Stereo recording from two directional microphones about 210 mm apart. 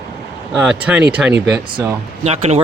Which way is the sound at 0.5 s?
5° right (ahead or behind).